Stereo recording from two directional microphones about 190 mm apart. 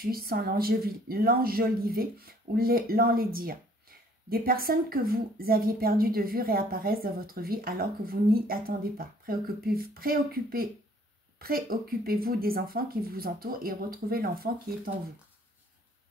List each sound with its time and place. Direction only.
0.0 s a woman's voice: 55° right (ahead or behind)